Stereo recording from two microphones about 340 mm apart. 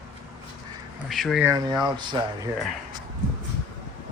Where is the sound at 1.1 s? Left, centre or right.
Centre.